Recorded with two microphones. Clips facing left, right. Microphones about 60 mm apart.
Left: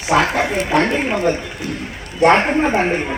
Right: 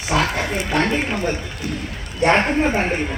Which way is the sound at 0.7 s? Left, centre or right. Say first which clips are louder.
Left 1 dB; centre.